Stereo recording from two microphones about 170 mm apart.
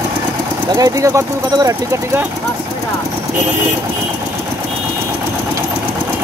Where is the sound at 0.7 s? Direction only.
20° right (ahead or behind).